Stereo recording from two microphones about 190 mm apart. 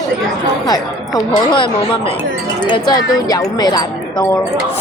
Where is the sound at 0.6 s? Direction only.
20° left (ahead or behind).